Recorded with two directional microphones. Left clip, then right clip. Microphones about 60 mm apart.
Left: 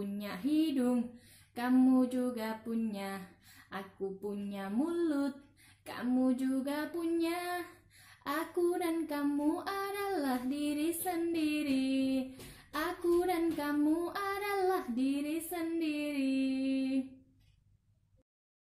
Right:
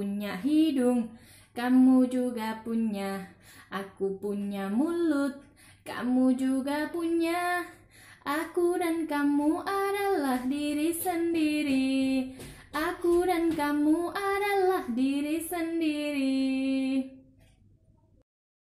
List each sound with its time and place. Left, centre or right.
0.0 s speech: left
1.5 s child singing: left
3.7 s a sound: centre
4.2 s child singing: left
4.8 s a sound: centre
5.9 s child singing: left